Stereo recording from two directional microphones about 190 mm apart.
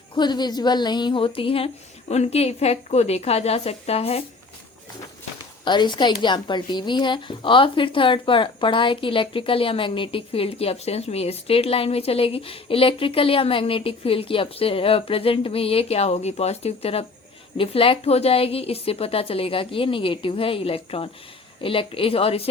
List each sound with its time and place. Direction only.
0.2 s a woman's voice: 20° left (ahead or behind)
5.6 s a woman's voice: 25° left (ahead or behind)